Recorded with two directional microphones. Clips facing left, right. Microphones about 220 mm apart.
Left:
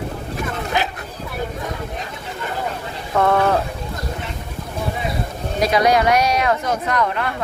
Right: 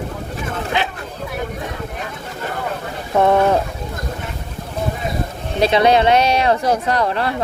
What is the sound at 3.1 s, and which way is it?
Speech, 20° right (ahead or behind).